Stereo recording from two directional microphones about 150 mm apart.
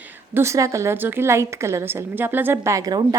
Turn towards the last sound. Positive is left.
turn(degrees=-25)  # may be behind; listen again after turning